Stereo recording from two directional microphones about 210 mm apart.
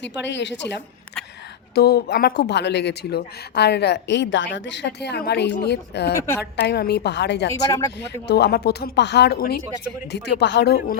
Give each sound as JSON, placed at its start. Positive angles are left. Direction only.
{"t": 0.0, "sound": "a woman's voice", "side_deg": 60}
{"t": 6.1, "sound": "speech", "side_deg": 10}
{"t": 6.4, "sound": "speech", "side_deg": 50}
{"t": 7.5, "sound": "speech", "side_deg": 15}
{"t": 8.0, "sound": "speech", "side_deg": 50}